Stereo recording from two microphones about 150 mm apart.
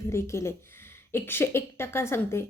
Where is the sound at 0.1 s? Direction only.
20° left (ahead or behind).